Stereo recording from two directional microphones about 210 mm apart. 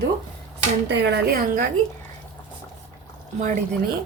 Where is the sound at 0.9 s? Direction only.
55° right (ahead or behind).